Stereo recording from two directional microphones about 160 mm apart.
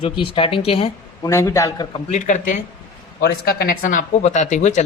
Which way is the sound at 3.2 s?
90° left.